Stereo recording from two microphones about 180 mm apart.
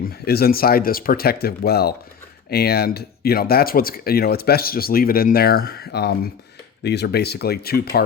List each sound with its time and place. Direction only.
0.1 s speech: 60° left (ahead or behind)